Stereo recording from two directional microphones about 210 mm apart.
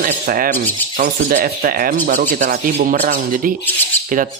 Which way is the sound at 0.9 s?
40° right (ahead or behind).